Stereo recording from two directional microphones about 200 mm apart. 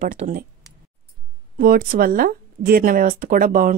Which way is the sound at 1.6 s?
45° right (ahead or behind).